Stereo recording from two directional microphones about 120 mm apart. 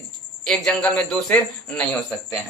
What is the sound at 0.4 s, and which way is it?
Speech, 5° left (ahead or behind).